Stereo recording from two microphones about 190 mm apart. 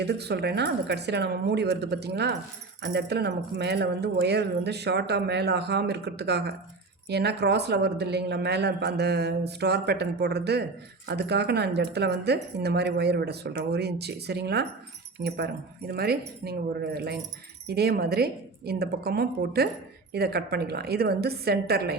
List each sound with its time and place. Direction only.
0.0 s speech: 60° right (ahead or behind)
15.9 s speech: 55° right (ahead or behind)